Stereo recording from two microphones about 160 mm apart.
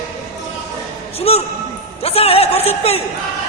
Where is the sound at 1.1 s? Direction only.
40° left (ahead or behind).